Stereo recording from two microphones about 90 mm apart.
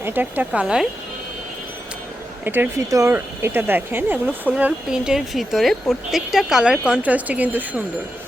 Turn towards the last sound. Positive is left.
turn(degrees=-15)  # may be behind; listen again after turning